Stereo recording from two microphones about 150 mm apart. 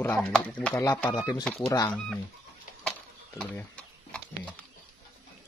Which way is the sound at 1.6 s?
25° left (ahead or behind).